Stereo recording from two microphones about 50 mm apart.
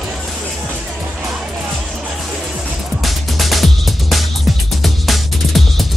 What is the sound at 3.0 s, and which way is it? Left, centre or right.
Music, centre.